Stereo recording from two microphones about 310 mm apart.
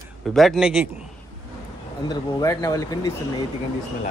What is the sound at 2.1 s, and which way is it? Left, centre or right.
Speech, centre.